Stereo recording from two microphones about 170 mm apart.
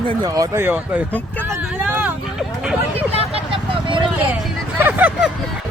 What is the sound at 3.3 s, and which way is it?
Vehicle, 30° right (ahead or behind).